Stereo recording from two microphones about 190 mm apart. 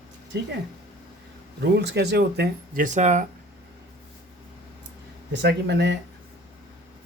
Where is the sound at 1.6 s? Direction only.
60° right (ahead or behind).